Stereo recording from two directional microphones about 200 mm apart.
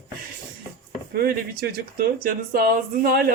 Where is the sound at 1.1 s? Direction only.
50° right (ahead or behind).